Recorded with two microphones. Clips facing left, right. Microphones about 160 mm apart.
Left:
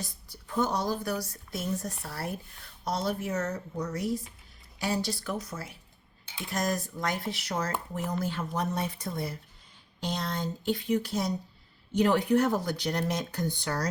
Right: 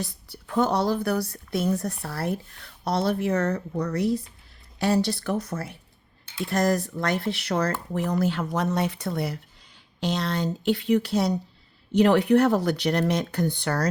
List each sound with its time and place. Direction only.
0.0 s speech: 65° right (ahead or behind)